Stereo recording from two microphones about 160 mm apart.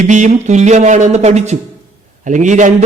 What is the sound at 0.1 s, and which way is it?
A man's voice, 50° right (ahead or behind).